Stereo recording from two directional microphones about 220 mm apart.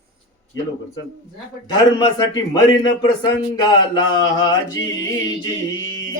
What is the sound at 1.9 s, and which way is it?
Speech, 15° left (ahead or behind).